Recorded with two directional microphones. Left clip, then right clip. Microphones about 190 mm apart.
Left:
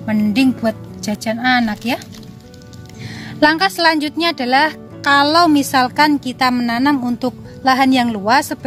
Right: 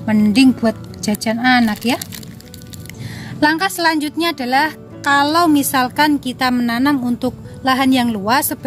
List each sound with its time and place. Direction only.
0.0 s speech: centre (ahead or behind)
3.2 s a woman's voice: 40° left (ahead or behind)